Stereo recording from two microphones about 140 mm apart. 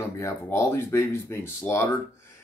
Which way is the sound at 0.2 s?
20° left (ahead or behind).